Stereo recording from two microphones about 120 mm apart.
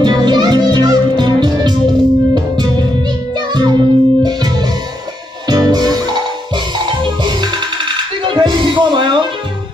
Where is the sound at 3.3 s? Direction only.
35° right (ahead or behind).